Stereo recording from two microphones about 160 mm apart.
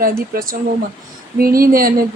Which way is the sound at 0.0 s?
65° right (ahead or behind).